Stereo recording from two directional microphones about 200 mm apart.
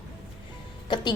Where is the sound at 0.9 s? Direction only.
20° left (ahead or behind).